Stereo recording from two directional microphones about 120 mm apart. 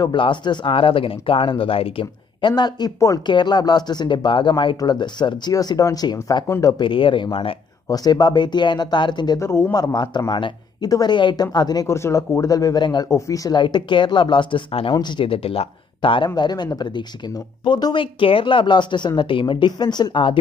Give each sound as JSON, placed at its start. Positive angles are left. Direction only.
{"t": 0.0, "sound": "speech", "side_deg": 40}
{"t": 6.8, "sound": "speech", "side_deg": 45}
{"t": 7.9, "sound": "speech", "side_deg": 35}
{"t": 9.4, "sound": "speech", "side_deg": 20}
{"t": 9.8, "sound": "speech", "side_deg": 35}
{"t": 13.6, "sound": "speech", "side_deg": 40}